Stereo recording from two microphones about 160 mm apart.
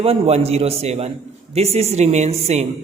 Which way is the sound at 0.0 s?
40° right (ahead or behind).